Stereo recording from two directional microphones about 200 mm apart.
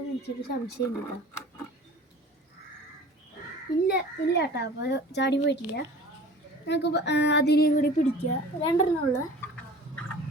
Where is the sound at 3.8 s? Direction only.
55° left (ahead or behind).